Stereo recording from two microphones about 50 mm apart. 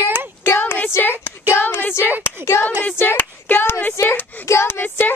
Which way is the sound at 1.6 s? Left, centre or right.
Left.